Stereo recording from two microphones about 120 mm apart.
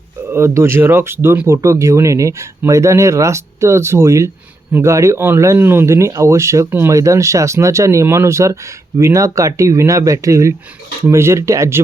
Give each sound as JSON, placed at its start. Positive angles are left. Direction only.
{"t": 0.3, "sound": "speech", "side_deg": -20}